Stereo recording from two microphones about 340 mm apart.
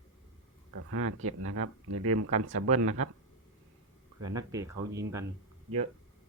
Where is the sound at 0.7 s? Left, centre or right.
Right.